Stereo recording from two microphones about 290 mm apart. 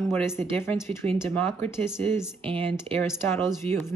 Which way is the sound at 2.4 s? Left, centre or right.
Centre.